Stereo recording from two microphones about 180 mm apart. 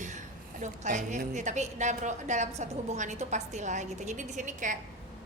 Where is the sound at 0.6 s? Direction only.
40° right (ahead or behind).